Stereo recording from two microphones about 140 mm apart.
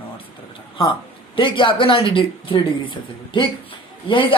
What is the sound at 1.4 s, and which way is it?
A man's voice, 35° left (ahead or behind).